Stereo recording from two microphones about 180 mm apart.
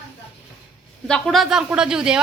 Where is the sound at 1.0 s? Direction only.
Centre (ahead or behind).